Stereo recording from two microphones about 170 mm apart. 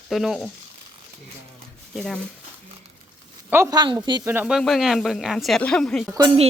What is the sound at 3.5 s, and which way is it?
Speech, 20° right (ahead or behind).